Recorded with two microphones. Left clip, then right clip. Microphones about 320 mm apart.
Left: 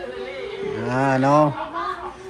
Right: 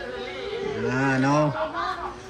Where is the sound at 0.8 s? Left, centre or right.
Centre.